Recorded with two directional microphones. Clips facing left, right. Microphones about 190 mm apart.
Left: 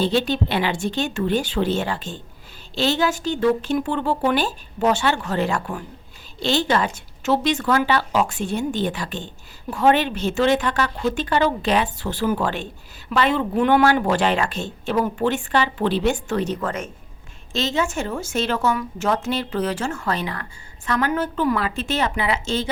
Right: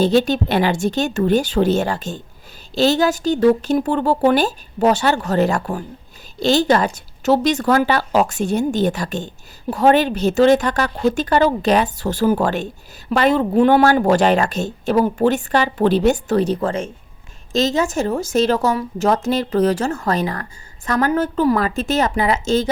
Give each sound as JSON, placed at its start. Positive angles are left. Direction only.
{"t": 0.0, "sound": "a woman's voice", "side_deg": -40}
{"t": 17.5, "sound": "a woman's voice", "side_deg": -40}